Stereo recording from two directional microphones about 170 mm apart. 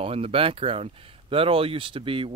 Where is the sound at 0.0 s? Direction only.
35° right (ahead or behind).